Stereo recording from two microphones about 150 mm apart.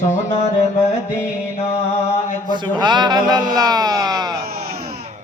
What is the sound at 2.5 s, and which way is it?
Speech, 30° right (ahead or behind).